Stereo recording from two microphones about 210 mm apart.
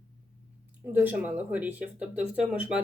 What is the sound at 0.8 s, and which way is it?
Speech, 10° right (ahead or behind).